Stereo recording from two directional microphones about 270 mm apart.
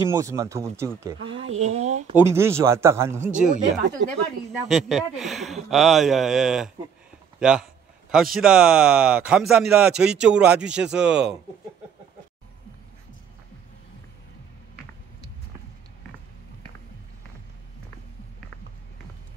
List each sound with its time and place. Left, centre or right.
0.0 s speech: centre
1.6 s a sound: right
2.1 s speech: centre
3.3 s speech: right
4.0 s a woman's voice: right
4.6 s speech: centre